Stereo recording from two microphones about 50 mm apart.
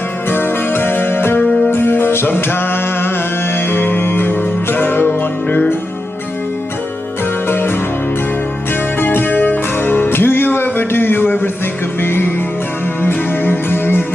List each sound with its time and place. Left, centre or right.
0.3 s music: left
2.3 s a sound: left
3.5 s music: left
7.4 s music: left
9.0 s music: left